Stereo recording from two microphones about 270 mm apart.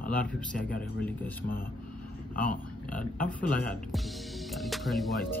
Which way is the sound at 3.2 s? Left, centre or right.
Left.